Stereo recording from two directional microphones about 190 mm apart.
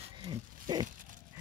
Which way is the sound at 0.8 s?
45° right (ahead or behind).